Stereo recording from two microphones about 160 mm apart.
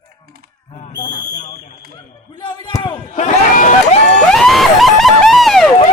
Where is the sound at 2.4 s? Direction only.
30° left (ahead or behind).